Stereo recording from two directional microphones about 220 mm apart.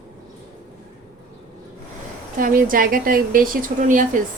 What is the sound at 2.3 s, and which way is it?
A woman's voice, 40° right (ahead or behind).